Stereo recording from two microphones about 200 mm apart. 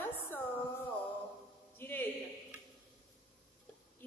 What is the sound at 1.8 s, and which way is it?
Speech, 10° left (ahead or behind).